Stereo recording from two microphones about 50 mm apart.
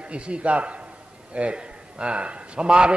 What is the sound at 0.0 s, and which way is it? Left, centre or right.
A man's voice, right.